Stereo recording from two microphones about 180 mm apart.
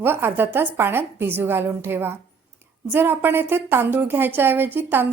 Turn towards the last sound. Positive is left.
turn(degrees=-10)  # may be behind; listen again after turning